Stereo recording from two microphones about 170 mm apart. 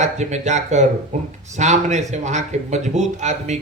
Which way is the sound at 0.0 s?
45° right (ahead or behind).